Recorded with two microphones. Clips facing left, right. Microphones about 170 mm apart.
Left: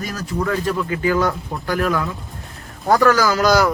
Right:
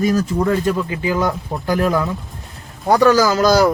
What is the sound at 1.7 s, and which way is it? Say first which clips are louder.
Speech: right 3 dB; 30° right (ahead or behind).